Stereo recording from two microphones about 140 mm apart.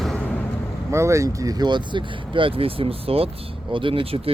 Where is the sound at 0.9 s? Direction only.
20° right (ahead or behind).